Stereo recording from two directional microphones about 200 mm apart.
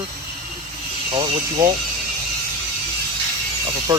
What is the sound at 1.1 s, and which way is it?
Speech, 25° right (ahead or behind).